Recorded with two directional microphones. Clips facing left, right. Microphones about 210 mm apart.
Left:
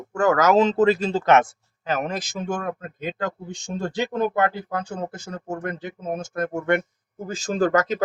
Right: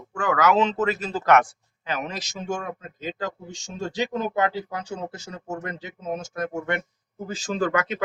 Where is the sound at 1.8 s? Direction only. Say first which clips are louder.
Left 5 dB; 50° left (ahead or behind).